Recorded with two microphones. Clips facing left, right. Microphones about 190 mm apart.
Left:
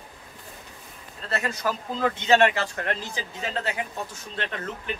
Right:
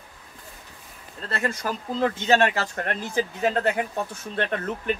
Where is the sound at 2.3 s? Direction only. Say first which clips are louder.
Left 3 dB; 40° right (ahead or behind).